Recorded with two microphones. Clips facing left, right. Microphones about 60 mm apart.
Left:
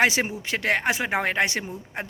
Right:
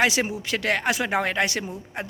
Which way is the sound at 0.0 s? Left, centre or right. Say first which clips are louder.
Left 1 dB; left.